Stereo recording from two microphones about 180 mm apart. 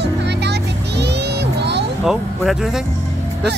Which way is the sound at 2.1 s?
Centre (ahead or behind).